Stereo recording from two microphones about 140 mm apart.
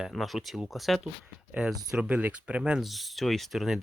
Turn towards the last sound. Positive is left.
turn(degrees=0)  # may be behind; listen again after turning